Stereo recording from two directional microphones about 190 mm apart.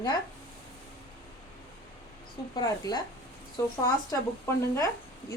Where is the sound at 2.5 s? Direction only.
20° left (ahead or behind).